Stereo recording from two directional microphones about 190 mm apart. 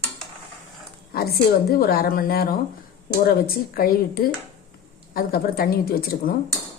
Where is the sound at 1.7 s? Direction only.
55° left (ahead or behind).